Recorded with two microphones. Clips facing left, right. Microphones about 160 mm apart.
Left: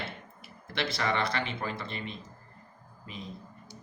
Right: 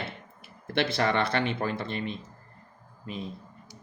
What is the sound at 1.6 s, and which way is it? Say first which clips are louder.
Speech: right 5 dB; 35° right (ahead or behind).